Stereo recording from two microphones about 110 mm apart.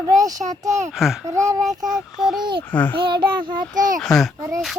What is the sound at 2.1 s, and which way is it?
Speech, 5° right (ahead or behind).